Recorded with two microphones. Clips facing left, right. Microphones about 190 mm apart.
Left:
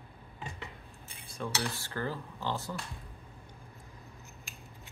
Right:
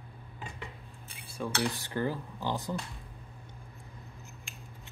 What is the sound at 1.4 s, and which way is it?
Cutlery, 15° right (ahead or behind).